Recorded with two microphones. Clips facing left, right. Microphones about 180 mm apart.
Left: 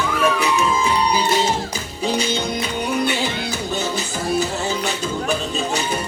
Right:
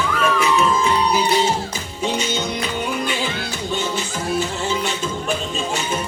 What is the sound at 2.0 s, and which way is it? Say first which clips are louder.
Music: left 1 dB; 35° left (ahead or behind).